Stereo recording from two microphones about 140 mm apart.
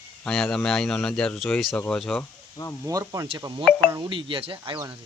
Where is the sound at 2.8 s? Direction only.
25° right (ahead or behind).